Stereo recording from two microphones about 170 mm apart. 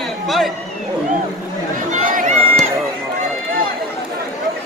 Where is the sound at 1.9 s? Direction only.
50° right (ahead or behind).